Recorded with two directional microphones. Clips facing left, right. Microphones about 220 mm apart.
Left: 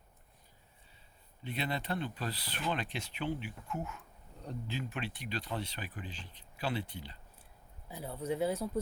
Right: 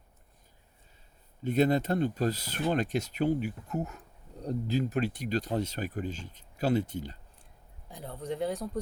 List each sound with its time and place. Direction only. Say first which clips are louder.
1.5 s speech: right 12 dB; 45° right (ahead or behind)
7.9 s speech: even; 5° left (ahead or behind)